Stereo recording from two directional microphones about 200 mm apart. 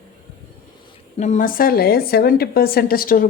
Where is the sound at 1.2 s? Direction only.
40° left (ahead or behind).